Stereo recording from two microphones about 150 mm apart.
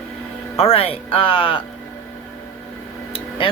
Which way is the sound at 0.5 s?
40° left (ahead or behind).